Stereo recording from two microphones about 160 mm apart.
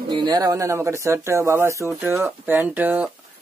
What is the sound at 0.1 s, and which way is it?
Speech, 25° right (ahead or behind).